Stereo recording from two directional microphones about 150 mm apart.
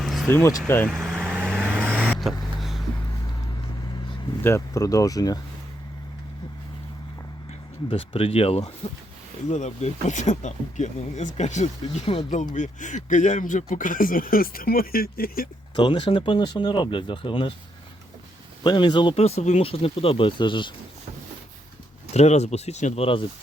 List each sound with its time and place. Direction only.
0.0 s vehicle: centre (ahead or behind)
0.3 s speech: 20° left (ahead or behind)
1.0 s vehicle: centre (ahead or behind)
4.4 s speech: 20° left (ahead or behind)
7.9 s speech: 40° left (ahead or behind); by 15.4 s 80° left
15.7 s speech: 30° left (ahead or behind)
18.6 s speech: 30° left (ahead or behind)
22.1 s speech: 45° left (ahead or behind)